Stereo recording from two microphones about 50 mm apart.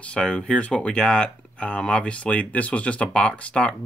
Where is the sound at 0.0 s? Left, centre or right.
Centre.